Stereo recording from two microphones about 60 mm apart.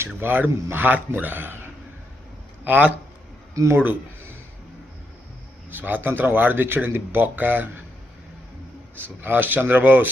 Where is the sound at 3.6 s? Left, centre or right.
Right.